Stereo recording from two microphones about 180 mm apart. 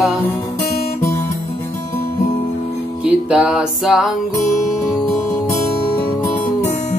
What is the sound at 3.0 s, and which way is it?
Music, 5° right (ahead or behind).